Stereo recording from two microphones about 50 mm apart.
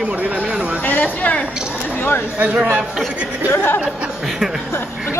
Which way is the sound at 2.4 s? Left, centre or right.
Right.